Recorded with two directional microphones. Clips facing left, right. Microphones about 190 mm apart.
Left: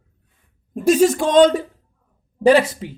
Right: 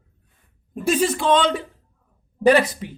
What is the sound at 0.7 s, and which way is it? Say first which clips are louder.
Speech: left 6 dB; 40° left (ahead or behind).